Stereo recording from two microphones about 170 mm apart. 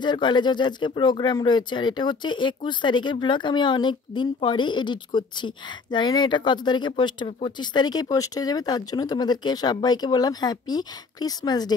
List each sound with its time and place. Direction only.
0.0 s speech: 25° left (ahead or behind)